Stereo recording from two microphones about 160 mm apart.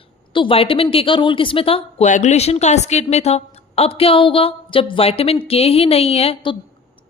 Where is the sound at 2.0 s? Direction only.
45° left (ahead or behind).